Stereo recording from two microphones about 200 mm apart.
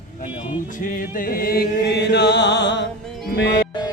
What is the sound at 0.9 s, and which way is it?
Chant, 45° left (ahead or behind).